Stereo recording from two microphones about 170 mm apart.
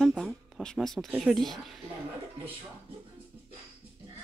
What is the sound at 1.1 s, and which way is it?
Speech, centre (ahead or behind).